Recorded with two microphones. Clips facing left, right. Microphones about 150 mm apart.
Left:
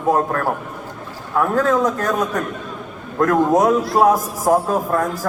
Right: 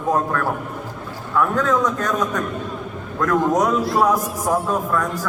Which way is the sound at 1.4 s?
35° left (ahead or behind).